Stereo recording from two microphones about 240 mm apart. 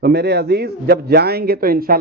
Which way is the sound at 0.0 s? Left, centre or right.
Right.